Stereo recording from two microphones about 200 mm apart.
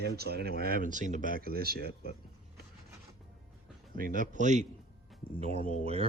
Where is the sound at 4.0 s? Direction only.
45° right (ahead or behind).